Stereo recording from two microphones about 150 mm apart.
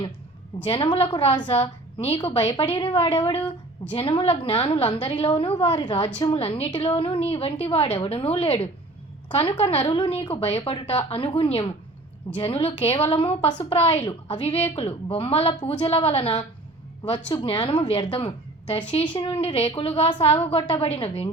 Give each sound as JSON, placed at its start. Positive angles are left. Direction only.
{"t": 0.6, "sound": "a woman's voice", "side_deg": 35}